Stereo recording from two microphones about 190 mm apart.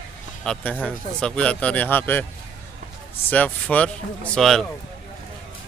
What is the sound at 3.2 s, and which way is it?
A man's voice, 10° left (ahead or behind).